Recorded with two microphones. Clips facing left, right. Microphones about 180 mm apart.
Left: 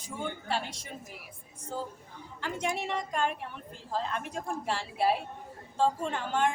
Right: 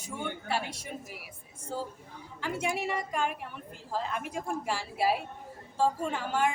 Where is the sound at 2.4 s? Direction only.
5° right (ahead or behind).